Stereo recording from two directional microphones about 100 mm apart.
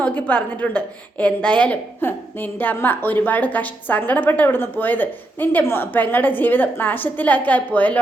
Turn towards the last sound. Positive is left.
turn(degrees=15)  # may be behind; listen again after turning